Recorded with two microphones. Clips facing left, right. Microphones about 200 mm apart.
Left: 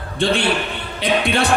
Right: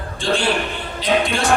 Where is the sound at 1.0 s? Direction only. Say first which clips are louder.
Left 1 dB; 60° left (ahead or behind).